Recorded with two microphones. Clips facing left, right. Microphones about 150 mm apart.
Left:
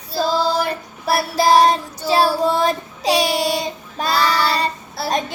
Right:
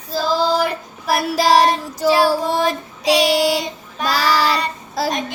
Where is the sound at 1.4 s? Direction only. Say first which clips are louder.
Left 1 dB; 90° right.